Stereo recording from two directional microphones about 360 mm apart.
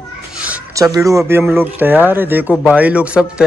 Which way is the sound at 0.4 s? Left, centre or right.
Centre.